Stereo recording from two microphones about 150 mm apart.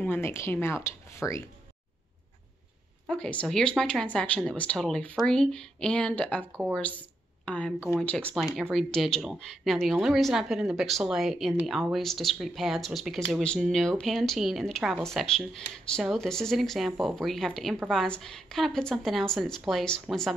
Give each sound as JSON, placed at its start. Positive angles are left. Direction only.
{"t": 0.0, "sound": "speech", "side_deg": 15}
{"t": 3.1, "sound": "a woman's voice", "side_deg": 5}